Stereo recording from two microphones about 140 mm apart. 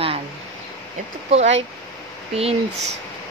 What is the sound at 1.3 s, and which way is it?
Speech, 50° right (ahead or behind).